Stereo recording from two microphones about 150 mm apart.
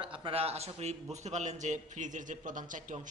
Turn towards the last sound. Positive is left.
turn(degrees=-60)  # may be behind; listen again after turning